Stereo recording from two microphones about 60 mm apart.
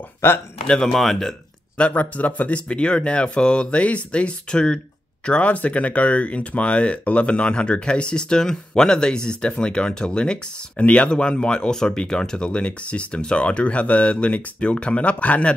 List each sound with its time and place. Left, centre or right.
0.2 s speech: left
0.7 s speech: centre
1.8 s speech: left